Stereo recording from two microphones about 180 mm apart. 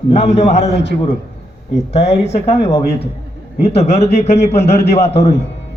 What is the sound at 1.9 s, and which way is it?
Speech, 35° left (ahead or behind).